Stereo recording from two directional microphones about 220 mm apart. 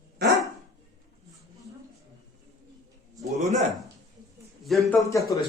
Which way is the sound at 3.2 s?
30° right (ahead or behind).